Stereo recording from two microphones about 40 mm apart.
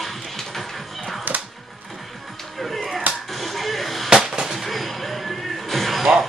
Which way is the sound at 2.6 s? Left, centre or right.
Centre.